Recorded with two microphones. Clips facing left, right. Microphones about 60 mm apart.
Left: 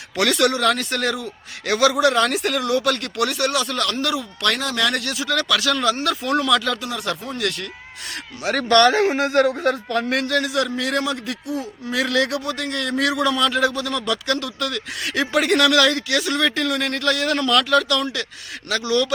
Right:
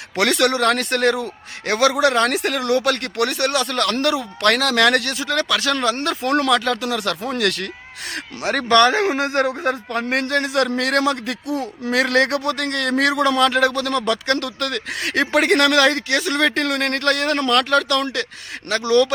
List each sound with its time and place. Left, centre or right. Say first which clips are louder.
0.2 s a man's voice: right 1 dB; right
5.1 s speech: even; right
6.8 s speech: right 4 dB; right
8.7 s a man's voice: even; centre
9.2 s a man's voice: left 2 dB; right
10.2 s speech: right 5 dB; right
10.8 s a man's voice: right 4 dB; right
14.0 s speech: right 3 dB; right
14.3 s a man's voice: right 2 dB; right
16.6 s speech: right 2 dB; right